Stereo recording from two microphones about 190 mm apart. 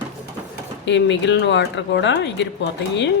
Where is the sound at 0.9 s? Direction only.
70° left (ahead or behind).